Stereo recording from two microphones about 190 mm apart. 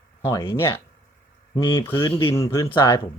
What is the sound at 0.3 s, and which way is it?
Speech, 15° left (ahead or behind).